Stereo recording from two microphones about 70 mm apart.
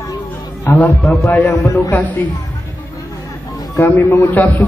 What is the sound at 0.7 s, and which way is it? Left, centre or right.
A man's voice, left.